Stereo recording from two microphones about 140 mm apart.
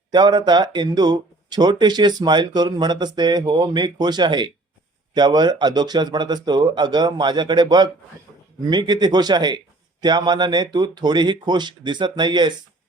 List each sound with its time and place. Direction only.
0.1 s speech: 30° right (ahead or behind)